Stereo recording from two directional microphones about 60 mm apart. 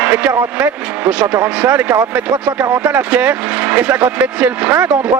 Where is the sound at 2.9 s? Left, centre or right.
Right.